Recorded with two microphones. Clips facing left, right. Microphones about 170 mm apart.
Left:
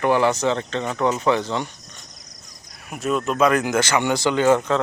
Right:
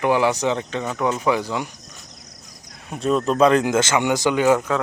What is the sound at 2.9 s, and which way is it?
Speech, 30° right (ahead or behind).